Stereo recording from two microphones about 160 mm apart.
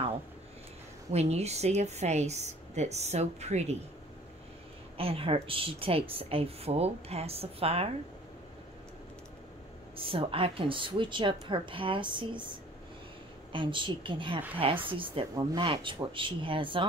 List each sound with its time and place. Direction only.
1.1 s a woman's voice: 40° right (ahead or behind)
4.9 s speech: 35° right (ahead or behind)
9.9 s speech: 35° right (ahead or behind)